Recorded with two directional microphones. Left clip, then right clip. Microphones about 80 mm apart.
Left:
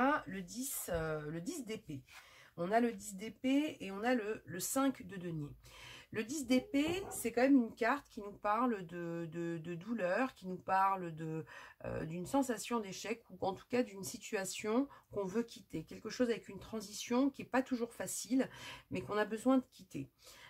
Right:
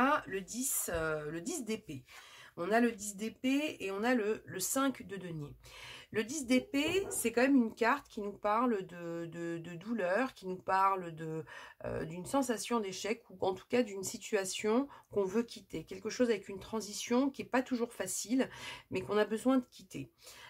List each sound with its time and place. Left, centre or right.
0.0 s a woman's voice: right
7.2 s speech: right
7.9 s speech: right